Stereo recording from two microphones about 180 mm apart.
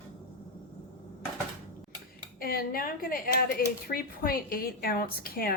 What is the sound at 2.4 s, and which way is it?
A woman's voice, 55° left (ahead or behind).